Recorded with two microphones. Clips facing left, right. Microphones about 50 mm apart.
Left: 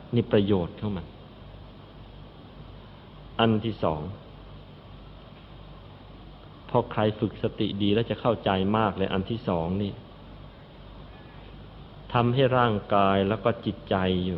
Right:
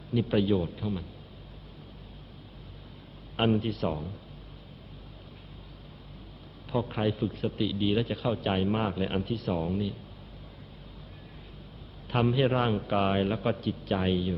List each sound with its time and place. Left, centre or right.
0.1 s a man's voice: centre
3.3 s a man's voice: centre
6.7 s a man's voice: centre
9.2 s speech: left
9.5 s a man's voice: centre
12.0 s a man's voice: centre